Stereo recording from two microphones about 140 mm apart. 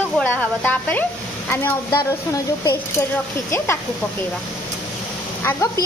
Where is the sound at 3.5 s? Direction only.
20° left (ahead or behind).